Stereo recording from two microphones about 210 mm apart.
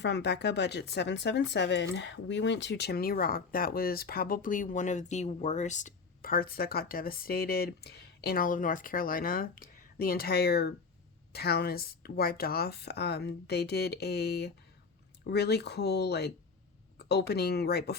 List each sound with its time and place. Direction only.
0.0 s speech: 55° left (ahead or behind)